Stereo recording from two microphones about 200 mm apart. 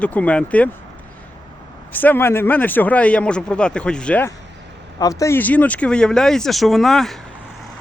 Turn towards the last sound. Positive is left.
turn(degrees=0)  # may be behind; listen again after turning